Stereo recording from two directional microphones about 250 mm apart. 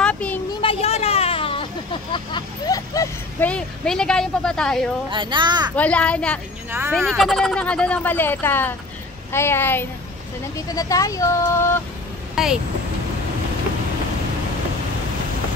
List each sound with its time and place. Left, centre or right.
0.0 s a sound: centre
0.5 s a sound: left
2.1 s speech: centre
5.1 s a child's voice: centre
5.8 s speech: centre
12.4 s speech: centre